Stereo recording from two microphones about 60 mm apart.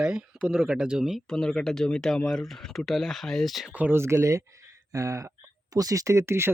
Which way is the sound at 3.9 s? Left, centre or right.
Right.